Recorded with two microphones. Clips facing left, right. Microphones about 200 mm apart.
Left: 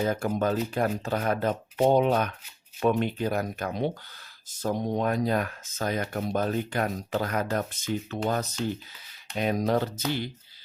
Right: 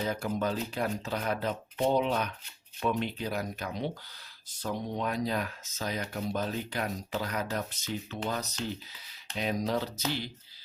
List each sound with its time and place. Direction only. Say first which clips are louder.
0.0 s speech: left 5 dB; 45° left (ahead or behind)